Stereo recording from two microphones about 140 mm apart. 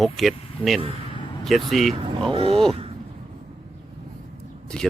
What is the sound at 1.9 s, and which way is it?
Speech, 40° right (ahead or behind).